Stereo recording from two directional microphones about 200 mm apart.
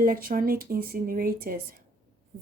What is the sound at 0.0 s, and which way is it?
Speech, 45° right (ahead or behind).